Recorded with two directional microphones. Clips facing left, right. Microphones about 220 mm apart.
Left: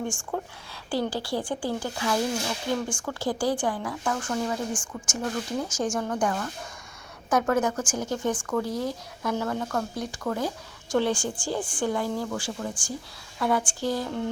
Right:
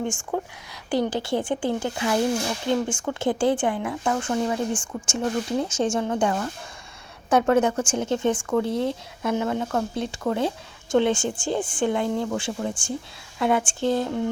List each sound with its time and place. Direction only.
0.3 s speech: 20° right (ahead or behind)